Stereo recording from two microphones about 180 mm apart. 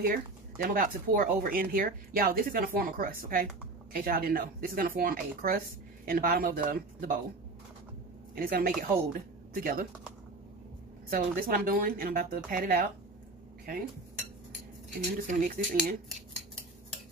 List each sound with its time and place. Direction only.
0.0 s speech: 55° right (ahead or behind)
8.4 s speech: 55° right (ahead or behind)
11.1 s speech: 55° right (ahead or behind)
15.2 s speech: 45° right (ahead or behind)